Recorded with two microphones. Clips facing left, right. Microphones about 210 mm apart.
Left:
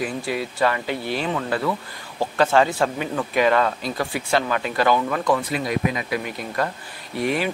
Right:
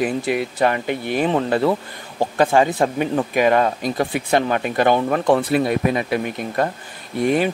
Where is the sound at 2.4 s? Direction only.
15° right (ahead or behind).